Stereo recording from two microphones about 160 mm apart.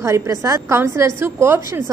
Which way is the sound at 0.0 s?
20° right (ahead or behind).